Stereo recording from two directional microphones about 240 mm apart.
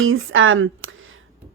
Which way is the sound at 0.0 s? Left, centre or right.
Right.